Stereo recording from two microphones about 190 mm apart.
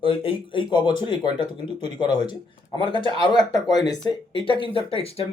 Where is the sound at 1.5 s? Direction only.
35° right (ahead or behind).